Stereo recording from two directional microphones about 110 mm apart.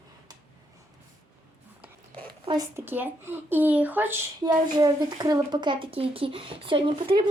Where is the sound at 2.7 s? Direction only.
20° right (ahead or behind).